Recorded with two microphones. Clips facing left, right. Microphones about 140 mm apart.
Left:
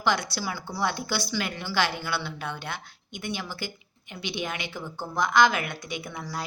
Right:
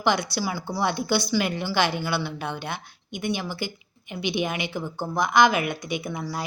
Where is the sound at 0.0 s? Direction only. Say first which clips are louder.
Right 3 dB; 15° right (ahead or behind).